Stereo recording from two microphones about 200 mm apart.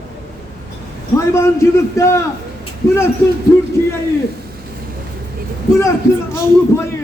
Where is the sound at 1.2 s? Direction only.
15° left (ahead or behind).